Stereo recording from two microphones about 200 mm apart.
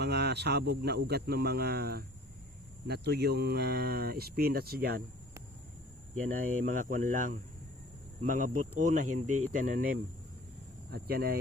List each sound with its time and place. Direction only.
0.0 s speech: 55° right (ahead or behind)
6.6 s speech: 40° right (ahead or behind)
10.9 s speech: 50° right (ahead or behind)